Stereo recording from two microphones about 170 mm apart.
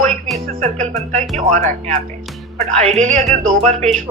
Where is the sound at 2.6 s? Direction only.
40° right (ahead or behind).